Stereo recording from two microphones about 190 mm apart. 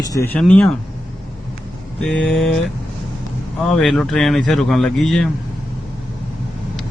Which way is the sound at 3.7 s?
5° left (ahead or behind).